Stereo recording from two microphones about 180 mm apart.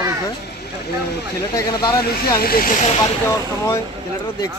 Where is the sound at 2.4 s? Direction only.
55° left (ahead or behind).